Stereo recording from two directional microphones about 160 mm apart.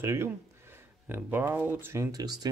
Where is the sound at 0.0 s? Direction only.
15° right (ahead or behind).